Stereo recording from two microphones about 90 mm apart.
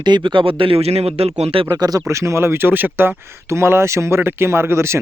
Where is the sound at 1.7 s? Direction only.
45° right (ahead or behind).